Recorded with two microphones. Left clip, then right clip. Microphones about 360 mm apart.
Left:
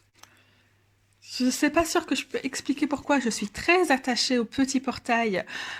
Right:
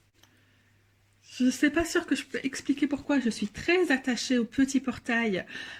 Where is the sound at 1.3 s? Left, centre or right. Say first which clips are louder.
Left 1 dB; centre.